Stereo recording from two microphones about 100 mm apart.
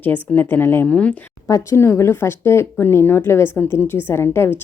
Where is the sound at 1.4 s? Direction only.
30° left (ahead or behind).